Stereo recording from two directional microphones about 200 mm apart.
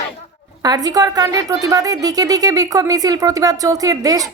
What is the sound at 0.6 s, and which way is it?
A woman's voice, 20° right (ahead or behind).